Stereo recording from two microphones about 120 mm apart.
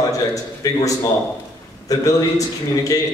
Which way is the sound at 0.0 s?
30° left (ahead or behind).